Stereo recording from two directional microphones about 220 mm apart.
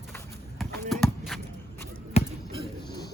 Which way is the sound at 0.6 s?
Centre (ahead or behind).